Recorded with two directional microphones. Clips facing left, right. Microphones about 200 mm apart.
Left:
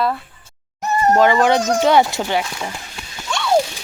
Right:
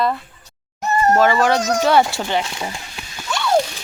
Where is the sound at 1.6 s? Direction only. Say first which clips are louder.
Left 1 dB; 30° left (ahead or behind).